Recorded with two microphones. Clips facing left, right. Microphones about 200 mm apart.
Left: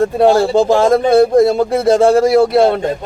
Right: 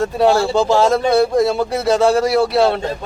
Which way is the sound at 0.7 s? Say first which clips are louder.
Left 3 dB; 50° left (ahead or behind).